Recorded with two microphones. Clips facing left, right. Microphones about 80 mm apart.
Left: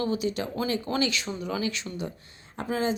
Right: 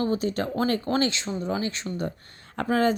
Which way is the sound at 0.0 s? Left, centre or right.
Right.